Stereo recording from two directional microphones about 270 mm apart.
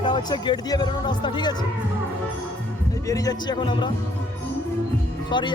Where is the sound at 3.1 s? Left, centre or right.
Centre.